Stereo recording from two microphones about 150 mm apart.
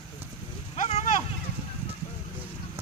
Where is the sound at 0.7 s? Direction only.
50° left (ahead or behind).